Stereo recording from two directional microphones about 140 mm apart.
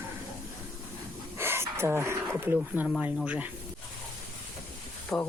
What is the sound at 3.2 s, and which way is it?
Speech, 10° right (ahead or behind).